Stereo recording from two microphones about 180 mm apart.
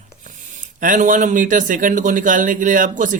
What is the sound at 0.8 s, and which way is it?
A man's voice, 45° right (ahead or behind).